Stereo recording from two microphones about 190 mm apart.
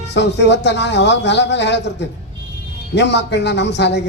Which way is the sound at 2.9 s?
65° left (ahead or behind).